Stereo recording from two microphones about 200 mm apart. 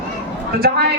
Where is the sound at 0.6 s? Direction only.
50° right (ahead or behind).